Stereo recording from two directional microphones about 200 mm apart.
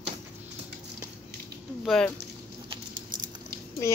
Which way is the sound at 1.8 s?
Centre (ahead or behind).